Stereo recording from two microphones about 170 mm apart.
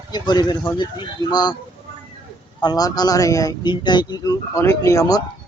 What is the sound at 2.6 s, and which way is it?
Speech, 25° left (ahead or behind).